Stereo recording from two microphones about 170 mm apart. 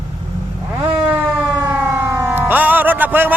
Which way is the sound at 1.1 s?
10° right (ahead or behind).